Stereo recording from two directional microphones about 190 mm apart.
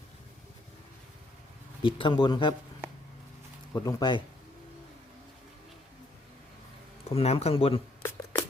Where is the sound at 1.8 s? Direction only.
25° left (ahead or behind).